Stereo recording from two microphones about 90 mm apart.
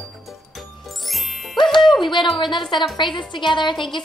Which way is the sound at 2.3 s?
60° left (ahead or behind).